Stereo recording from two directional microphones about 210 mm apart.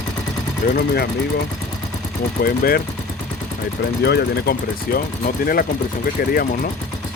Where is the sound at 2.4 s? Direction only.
45° left (ahead or behind).